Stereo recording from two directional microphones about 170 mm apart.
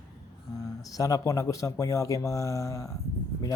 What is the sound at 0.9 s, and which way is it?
Speech, 20° left (ahead or behind).